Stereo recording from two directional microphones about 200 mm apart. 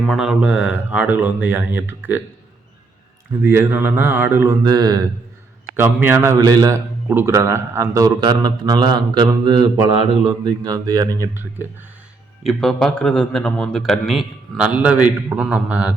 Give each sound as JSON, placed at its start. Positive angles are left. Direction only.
{"t": 0.0, "sound": "speech", "side_deg": 0}
{"t": 3.4, "sound": "a man's voice", "side_deg": -10}
{"t": 12.4, "sound": "a man's voice", "side_deg": 0}